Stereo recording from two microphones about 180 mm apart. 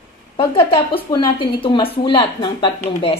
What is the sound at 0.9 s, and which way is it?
A woman's voice, 25° left (ahead or behind).